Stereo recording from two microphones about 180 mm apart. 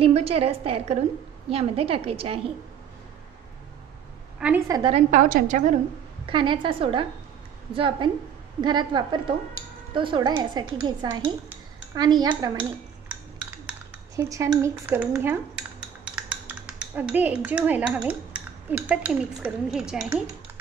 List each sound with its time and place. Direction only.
0.0 s a woman's voice: 35° right (ahead or behind)
4.4 s a woman's voice: 10° right (ahead or behind)
4.6 s speech: 20° right (ahead or behind)
4.9 s a woman's voice: 45° right (ahead or behind)
6.2 s speech: 25° right (ahead or behind)
11.4 s dishes: 20° right (ahead or behind)
12.3 s speech: 10° right (ahead or behind)
13.7 s speech: 15° right (ahead or behind)